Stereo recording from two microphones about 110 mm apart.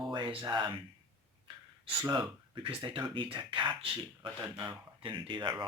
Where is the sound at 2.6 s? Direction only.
50° right (ahead or behind).